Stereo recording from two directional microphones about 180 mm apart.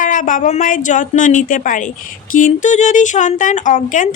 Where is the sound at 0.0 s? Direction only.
45° left (ahead or behind).